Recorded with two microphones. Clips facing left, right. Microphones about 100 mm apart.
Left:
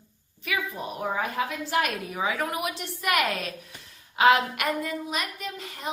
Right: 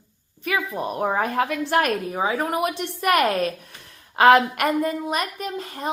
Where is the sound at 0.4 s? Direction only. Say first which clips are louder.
Right 6 dB; 55° right (ahead or behind).